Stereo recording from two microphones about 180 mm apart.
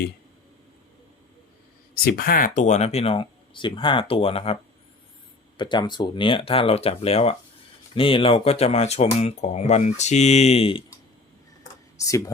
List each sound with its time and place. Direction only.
2.0 s speech: 60° left (ahead or behind); by 4.5 s 30° left (ahead or behind)
5.5 s speech: 25° left (ahead or behind)
11.9 s speech: 20° left (ahead or behind)